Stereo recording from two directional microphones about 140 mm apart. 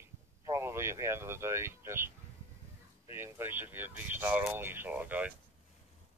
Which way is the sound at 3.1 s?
15° right (ahead or behind).